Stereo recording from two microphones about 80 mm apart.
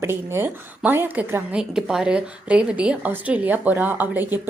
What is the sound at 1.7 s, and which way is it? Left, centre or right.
Speech, centre.